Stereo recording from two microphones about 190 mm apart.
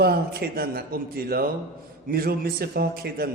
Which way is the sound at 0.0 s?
55° right (ahead or behind).